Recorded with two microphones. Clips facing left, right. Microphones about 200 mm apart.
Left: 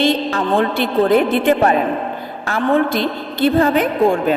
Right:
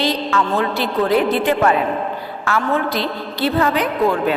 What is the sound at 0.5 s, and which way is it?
A woman's voice, 50° left (ahead or behind).